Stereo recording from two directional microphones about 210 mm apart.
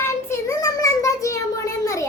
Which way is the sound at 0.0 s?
15° left (ahead or behind).